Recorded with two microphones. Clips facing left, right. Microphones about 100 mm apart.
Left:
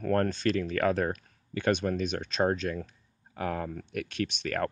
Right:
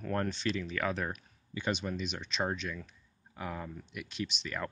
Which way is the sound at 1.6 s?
55° left (ahead or behind).